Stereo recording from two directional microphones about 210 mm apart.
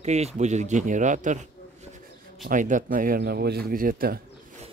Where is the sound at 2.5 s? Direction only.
40° right (ahead or behind).